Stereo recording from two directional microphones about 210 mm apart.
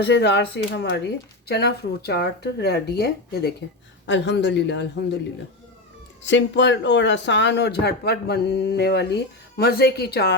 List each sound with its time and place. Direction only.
0.0 s speech: 55° left (ahead or behind)
6.2 s speech: 60° left (ahead or behind)